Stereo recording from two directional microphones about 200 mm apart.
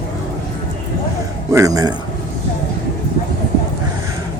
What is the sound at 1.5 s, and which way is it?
Speech, 15° right (ahead or behind).